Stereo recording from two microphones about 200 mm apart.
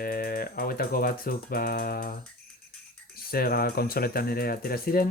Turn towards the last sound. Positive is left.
turn(degrees=45)  # may be behind; listen again after turning